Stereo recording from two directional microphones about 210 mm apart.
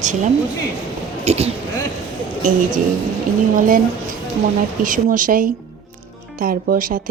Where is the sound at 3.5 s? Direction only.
40° right (ahead or behind).